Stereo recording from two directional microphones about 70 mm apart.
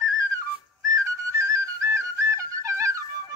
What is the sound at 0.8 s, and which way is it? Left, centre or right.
Flute, right.